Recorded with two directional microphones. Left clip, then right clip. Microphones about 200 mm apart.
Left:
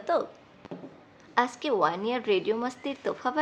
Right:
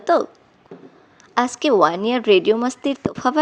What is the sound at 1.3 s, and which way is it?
Speech, 35° right (ahead or behind).